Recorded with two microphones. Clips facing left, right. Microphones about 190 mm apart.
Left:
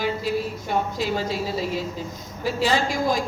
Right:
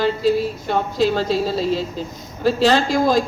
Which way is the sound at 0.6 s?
80° right.